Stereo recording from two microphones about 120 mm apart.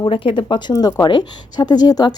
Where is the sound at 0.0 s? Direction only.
45° left (ahead or behind).